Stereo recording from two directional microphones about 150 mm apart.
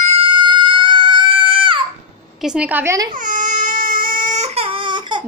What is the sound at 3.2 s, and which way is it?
Baby cry, 60° right (ahead or behind).